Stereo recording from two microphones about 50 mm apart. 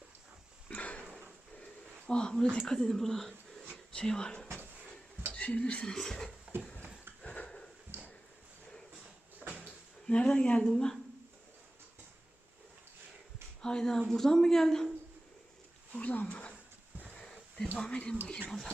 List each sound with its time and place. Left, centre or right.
0.7 s sniff: left
2.0 s speech: centre
7.3 s a sound: left
10.1 s speech: left
13.6 s speech: centre
16.0 s roaring cats: left
17.2 s a sound: centre
17.7 s speech: centre